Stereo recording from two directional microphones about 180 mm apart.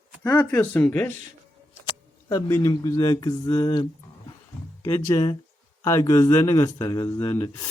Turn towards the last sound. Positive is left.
turn(degrees=15)  # may be behind; listen again after turning